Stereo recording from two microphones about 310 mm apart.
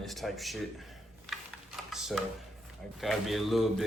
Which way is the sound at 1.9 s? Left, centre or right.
Centre.